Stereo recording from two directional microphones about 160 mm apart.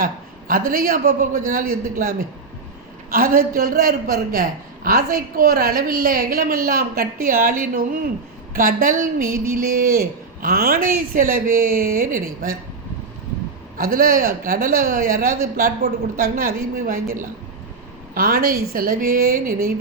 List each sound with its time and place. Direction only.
0.0 s a man's voice: 65° right (ahead or behind)
10.4 s a man's voice: 65° right (ahead or behind)
13.7 s a man's voice: 65° right (ahead or behind)